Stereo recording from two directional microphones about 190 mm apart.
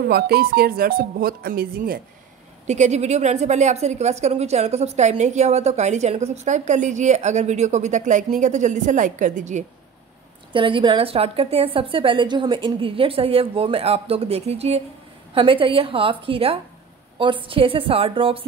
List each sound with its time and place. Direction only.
0.0 s speech: 55° right (ahead or behind)
2.6 s a woman's voice: 35° right (ahead or behind)
10.5 s a woman's voice: 25° right (ahead or behind)